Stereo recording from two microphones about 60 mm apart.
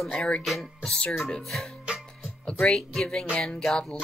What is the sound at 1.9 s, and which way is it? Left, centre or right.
Music, centre.